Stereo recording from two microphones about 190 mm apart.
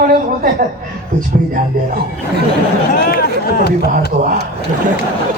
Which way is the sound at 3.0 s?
55° left (ahead or behind).